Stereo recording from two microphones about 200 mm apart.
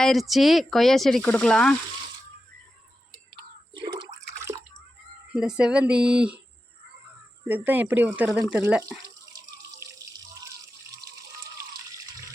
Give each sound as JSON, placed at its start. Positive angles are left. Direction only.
{"t": 0.0, "sound": "speech", "side_deg": 0}
{"t": 3.8, "sound": "a sound", "side_deg": -25}
{"t": 5.3, "sound": "speech", "side_deg": -5}
{"t": 7.4, "sound": "speech", "side_deg": -10}